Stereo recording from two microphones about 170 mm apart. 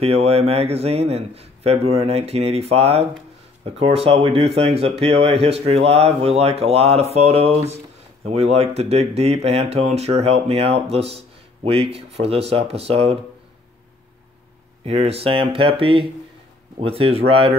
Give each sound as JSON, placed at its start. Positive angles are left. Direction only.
{"t": 0.0, "sound": "speech", "side_deg": -35}
{"t": 14.9, "sound": "speech", "side_deg": -35}